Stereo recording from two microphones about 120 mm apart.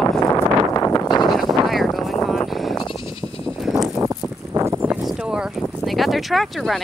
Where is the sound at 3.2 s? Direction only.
15° right (ahead or behind).